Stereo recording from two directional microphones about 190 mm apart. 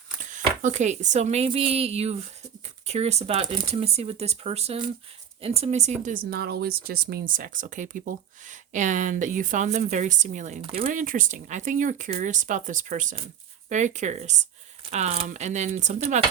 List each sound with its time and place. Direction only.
0.2 s speech: 40° right (ahead or behind)
10.8 s speech: 45° right (ahead or behind)